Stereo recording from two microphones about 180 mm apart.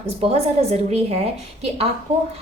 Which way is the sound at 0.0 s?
35° right (ahead or behind).